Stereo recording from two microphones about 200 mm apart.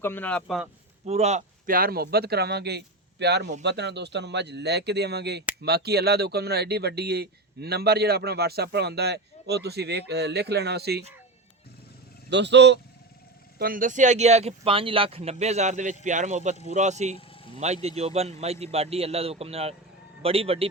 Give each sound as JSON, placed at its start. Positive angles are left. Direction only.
{"t": 0.0, "sound": "a man's voice", "side_deg": 10}
{"t": 1.0, "sound": "speech", "side_deg": -35}
{"t": 12.3, "sound": "speech", "side_deg": -60}
{"t": 13.6, "sound": "speech", "side_deg": -45}